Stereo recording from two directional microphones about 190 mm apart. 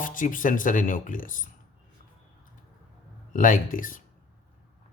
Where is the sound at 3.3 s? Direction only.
45° left (ahead or behind).